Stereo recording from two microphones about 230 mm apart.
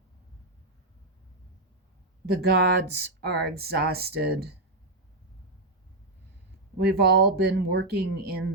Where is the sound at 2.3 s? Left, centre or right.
Right.